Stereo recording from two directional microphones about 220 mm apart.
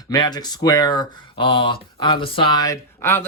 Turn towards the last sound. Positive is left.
turn(degrees=10)  # may be behind; listen again after turning